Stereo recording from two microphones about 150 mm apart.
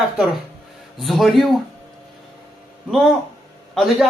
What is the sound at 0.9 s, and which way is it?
Speech, centre (ahead or behind).